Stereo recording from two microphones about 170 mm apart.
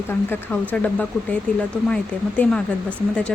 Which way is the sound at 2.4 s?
10° left (ahead or behind).